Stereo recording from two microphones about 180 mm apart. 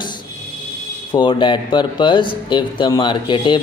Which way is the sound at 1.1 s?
25° left (ahead or behind).